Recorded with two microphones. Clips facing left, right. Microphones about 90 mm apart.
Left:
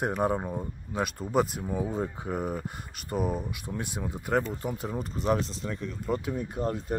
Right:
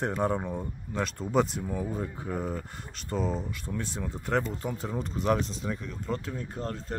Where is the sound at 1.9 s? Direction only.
15° left (ahead or behind).